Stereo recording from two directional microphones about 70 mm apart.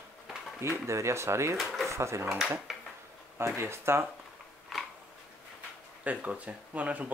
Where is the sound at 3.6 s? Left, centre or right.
Right.